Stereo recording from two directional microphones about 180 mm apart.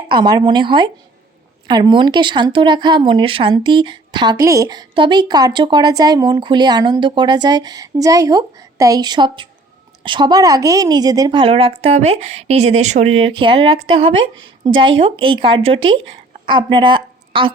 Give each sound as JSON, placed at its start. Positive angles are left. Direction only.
{"t": 0.1, "sound": "a woman's voice", "side_deg": -25}